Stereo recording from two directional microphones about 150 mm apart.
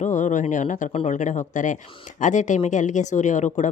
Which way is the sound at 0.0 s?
55° left (ahead or behind).